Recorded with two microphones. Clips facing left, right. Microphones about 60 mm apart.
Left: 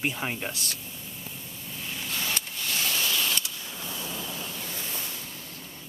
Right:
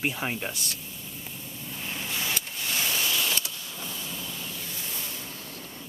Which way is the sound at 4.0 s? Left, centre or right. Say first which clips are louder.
Left 2 dB; left.